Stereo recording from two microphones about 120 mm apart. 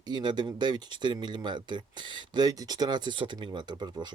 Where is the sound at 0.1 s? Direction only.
40° right (ahead or behind).